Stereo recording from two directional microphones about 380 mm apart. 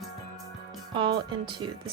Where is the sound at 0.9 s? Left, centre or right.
Centre.